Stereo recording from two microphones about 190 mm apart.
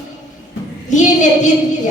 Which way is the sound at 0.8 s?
40° left (ahead or behind).